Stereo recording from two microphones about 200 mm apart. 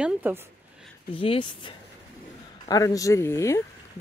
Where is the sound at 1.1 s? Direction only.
25° left (ahead or behind).